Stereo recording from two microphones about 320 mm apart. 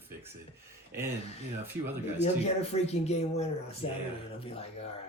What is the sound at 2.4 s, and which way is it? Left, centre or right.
Speech, centre.